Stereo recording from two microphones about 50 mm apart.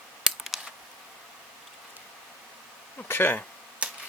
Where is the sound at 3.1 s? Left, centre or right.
Left.